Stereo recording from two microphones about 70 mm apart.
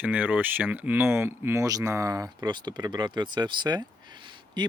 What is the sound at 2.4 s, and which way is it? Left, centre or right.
Speech, right.